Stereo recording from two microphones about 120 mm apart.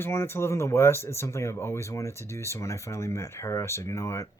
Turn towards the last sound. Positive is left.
turn(degrees=25)  # may be behind; listen again after turning